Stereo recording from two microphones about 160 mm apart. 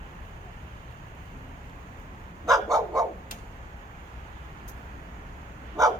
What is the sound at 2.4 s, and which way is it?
Dog, 20° right (ahead or behind).